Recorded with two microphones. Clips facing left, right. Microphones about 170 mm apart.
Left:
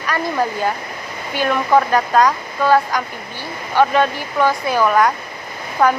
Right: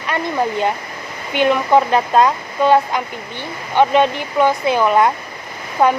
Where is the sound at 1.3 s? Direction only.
20° right (ahead or behind).